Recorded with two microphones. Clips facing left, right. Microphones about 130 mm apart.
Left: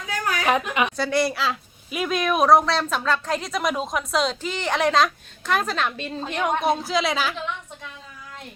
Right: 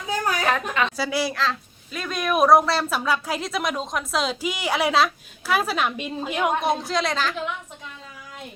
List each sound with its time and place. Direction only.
0.1 s a sound: 35° right (ahead or behind)
0.4 s a woman's voice: 15° left (ahead or behind)
0.9 s speech: 5° right (ahead or behind); by 2.1 s 10° left (ahead or behind)
2.1 s a woman's voice: centre (ahead or behind)